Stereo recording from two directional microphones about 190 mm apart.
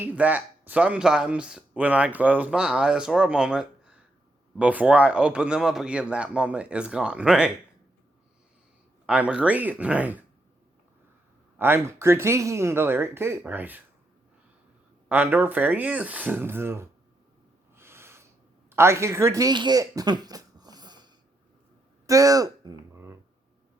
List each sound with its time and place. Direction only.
0.0 s a man's voice: 10° right (ahead or behind)
9.0 s speech: 5° right (ahead or behind)
11.5 s speech: 10° right (ahead or behind)
15.1 s speech: 10° right (ahead or behind)
17.7 s snort: 15° right (ahead or behind)
18.7 s speech: 15° right (ahead or behind)
22.0 s a sound: 15° right (ahead or behind)